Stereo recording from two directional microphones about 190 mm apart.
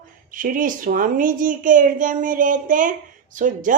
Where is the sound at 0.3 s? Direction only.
45° right (ahead or behind).